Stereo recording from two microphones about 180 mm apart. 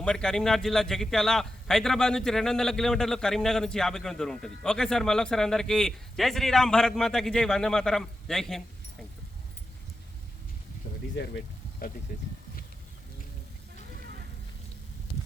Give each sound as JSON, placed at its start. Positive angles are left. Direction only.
{"t": 0.0, "sound": "a man's voice", "side_deg": 5}
{"t": 11.1, "sound": "speech", "side_deg": 70}